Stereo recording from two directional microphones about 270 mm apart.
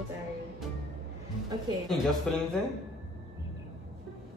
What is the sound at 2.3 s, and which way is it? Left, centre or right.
Speech, centre.